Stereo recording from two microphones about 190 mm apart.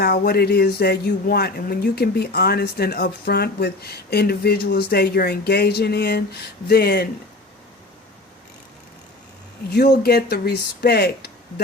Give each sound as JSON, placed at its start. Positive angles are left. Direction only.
{"t": 0.0, "sound": "speech", "side_deg": 55}
{"t": 9.7, "sound": "speech", "side_deg": 55}